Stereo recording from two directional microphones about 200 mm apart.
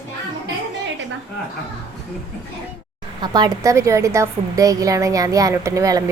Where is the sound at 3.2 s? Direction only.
20° right (ahead or behind).